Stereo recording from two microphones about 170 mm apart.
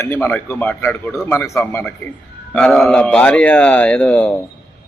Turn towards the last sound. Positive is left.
turn(degrees=5)  # may be behind; listen again after turning